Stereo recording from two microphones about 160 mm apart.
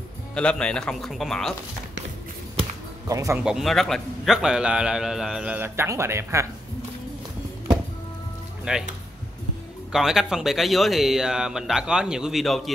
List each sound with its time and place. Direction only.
0.3 s a man's voice: 5° left (ahead or behind)
3.1 s speech: 20° right (ahead or behind)
3.4 s a man's voice: centre (ahead or behind)
8.7 s speech: 5° right (ahead or behind)
9.9 s a man's voice: 5° right (ahead or behind)